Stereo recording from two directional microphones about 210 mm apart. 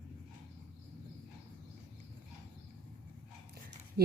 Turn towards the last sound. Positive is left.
turn(degrees=-50)  # may be behind; listen again after turning